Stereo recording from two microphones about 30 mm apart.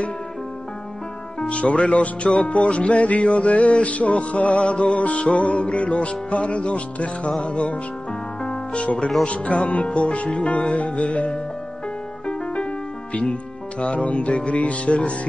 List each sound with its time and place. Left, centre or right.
1.4 s music: left
13.1 s speech: left
14.0 s music: left